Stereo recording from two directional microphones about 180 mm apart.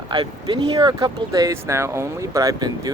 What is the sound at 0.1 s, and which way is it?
Speech, 25° right (ahead or behind).